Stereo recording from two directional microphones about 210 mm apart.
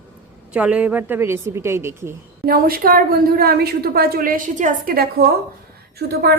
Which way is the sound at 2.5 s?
45° right (ahead or behind).